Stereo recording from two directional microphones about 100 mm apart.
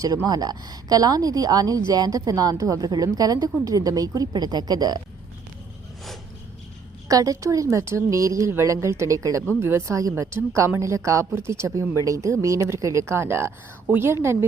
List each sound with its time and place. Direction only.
0.3 s a woman's voice: 40° right (ahead or behind)
7.1 s a woman's voice: 35° right (ahead or behind)